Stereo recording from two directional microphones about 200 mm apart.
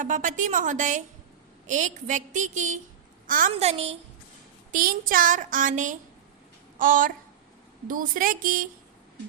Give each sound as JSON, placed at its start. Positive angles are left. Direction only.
{"t": 0.0, "sound": "a woman's voice", "side_deg": -40}
{"t": 3.5, "sound": "a woman's voice", "side_deg": -30}
{"t": 4.7, "sound": "a woman's voice", "side_deg": -45}